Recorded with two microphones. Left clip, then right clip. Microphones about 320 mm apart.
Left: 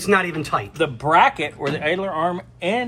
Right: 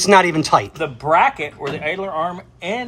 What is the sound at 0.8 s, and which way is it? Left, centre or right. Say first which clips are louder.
Speech: even; left.